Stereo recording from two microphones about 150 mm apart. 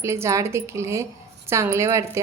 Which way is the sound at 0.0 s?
20° right (ahead or behind).